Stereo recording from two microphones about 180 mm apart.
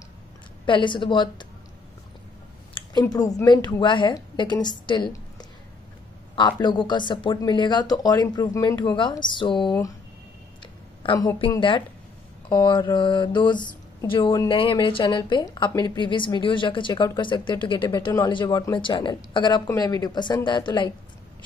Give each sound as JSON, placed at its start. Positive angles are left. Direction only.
{"t": 0.7, "sound": "speech", "side_deg": 25}
{"t": 2.7, "sound": "a woman's voice", "side_deg": 20}
{"t": 11.0, "sound": "a woman's voice", "side_deg": 25}